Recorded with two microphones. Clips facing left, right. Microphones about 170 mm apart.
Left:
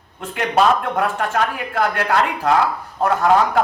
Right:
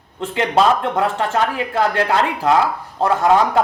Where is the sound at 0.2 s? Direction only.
25° right (ahead or behind).